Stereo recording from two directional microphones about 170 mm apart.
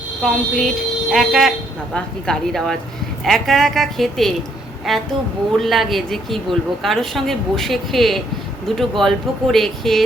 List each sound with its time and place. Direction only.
0.2 s a woman's voice: centre (ahead or behind)